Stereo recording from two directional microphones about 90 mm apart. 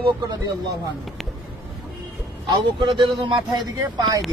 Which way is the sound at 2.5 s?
65° right (ahead or behind).